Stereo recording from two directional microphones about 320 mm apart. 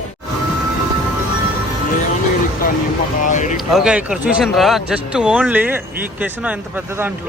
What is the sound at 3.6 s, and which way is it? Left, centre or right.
Speech, centre.